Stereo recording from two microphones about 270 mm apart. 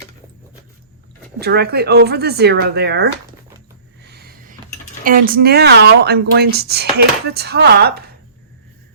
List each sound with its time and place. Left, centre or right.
1.4 s speech: right
4.0 s a sound: right
5.0 s speech: right